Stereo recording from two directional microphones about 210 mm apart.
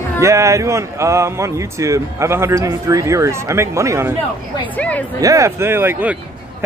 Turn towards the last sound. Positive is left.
turn(degrees=-10)  # may be behind; listen again after turning